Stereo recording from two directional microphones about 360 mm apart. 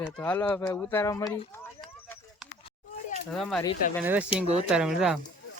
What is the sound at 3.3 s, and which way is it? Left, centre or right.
Speech, centre.